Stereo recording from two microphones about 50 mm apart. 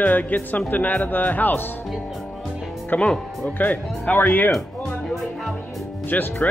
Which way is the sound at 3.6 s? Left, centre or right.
Left.